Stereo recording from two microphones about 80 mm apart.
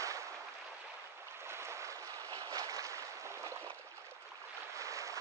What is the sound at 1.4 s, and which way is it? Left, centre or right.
Boat, right.